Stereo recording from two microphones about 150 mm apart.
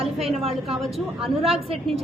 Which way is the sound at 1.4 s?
40° right (ahead or behind).